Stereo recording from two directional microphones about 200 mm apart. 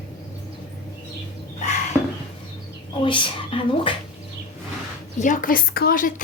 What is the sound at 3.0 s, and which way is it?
Speech, 25° left (ahead or behind).